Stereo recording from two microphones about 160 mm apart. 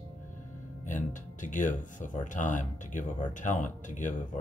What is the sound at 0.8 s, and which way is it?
Speech, 50° left (ahead or behind).